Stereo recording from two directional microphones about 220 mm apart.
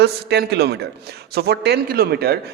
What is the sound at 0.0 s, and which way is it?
A man's voice, 50° right (ahead or behind).